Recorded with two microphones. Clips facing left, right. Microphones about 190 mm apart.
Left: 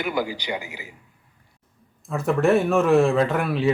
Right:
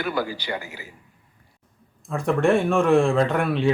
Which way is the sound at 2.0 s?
5° left (ahead or behind).